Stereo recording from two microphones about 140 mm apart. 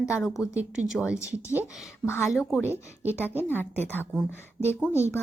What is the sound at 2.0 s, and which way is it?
Speech, 20° left (ahead or behind).